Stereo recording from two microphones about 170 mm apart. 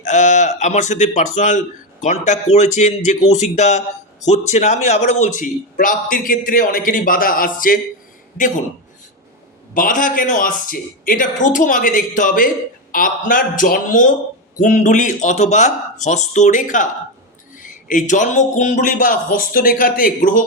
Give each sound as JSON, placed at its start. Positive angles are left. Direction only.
{"t": 0.0, "sound": "a man's voice", "side_deg": 45}
{"t": 9.7, "sound": "a man's voice", "side_deg": 50}